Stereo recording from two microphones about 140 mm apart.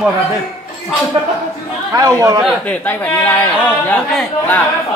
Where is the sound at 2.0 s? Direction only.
20° right (ahead or behind).